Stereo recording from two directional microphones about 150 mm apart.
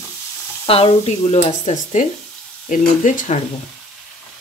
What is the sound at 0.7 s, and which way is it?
Speech, 40° left (ahead or behind).